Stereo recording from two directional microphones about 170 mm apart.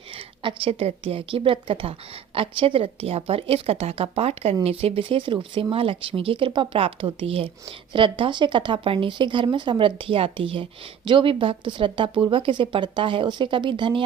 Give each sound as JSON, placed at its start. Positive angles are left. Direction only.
{"t": 0.4, "sound": "a woman's voice", "side_deg": -35}